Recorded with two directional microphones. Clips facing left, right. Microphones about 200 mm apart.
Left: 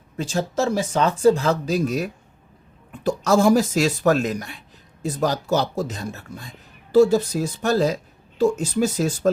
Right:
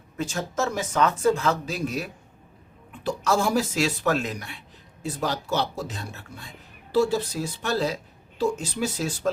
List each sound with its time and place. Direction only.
0.2 s speech: 30° left (ahead or behind)